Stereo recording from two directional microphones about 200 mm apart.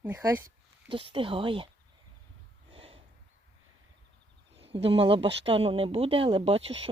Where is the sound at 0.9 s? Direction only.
25° right (ahead or behind).